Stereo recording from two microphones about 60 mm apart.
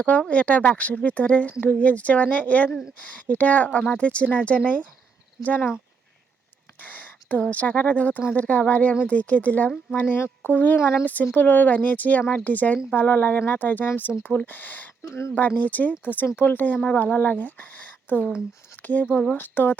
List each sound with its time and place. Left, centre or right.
0.0 s speech: left
6.7 s speech: left